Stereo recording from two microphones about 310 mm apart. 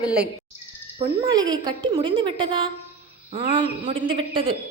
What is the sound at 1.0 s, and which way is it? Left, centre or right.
A woman's voice, centre.